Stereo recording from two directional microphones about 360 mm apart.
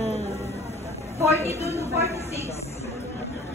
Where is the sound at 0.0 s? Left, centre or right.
Centre.